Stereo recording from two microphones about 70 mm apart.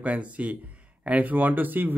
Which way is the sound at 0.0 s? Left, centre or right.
Centre.